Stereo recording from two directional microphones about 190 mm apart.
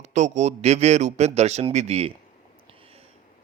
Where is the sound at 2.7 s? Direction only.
30° right (ahead or behind).